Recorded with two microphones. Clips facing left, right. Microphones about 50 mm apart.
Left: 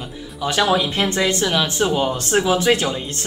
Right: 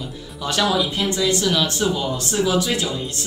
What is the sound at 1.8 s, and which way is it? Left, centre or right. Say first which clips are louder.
Speech: left 3 dB; left.